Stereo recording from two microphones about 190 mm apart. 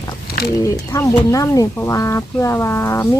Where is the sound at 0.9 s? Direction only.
15° left (ahead or behind).